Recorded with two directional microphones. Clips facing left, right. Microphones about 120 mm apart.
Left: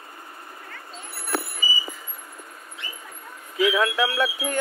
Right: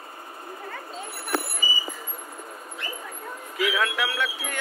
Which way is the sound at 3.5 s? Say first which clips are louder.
Left 4 dB; 25° left (ahead or behind).